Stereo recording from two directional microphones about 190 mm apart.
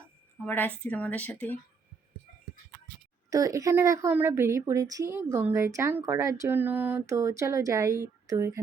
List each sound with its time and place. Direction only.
0.4 s speech: 10° left (ahead or behind)
3.2 s speech: 15° right (ahead or behind)